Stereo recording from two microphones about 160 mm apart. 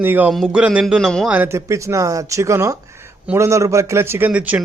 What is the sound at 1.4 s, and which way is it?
Speech, 15° right (ahead or behind).